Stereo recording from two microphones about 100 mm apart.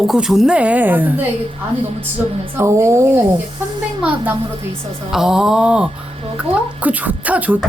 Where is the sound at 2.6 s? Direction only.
25° right (ahead or behind).